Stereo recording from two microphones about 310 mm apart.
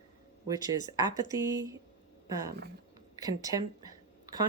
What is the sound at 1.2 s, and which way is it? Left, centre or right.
Speech, centre.